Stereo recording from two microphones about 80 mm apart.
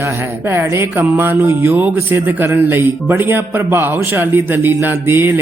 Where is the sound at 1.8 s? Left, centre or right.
Right.